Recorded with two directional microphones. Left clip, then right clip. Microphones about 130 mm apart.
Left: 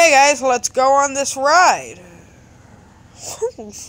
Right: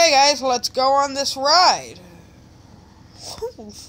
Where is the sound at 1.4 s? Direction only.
15° left (ahead or behind).